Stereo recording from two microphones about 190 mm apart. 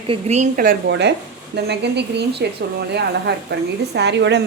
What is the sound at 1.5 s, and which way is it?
A woman's voice, 60° right (ahead or behind).